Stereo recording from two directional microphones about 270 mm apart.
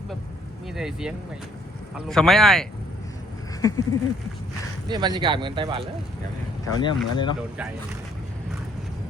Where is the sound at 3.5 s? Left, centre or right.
Centre.